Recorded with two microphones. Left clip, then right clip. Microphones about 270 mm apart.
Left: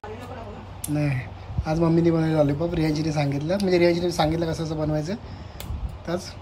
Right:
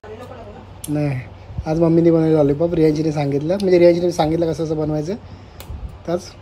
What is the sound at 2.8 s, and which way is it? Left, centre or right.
Speech, left.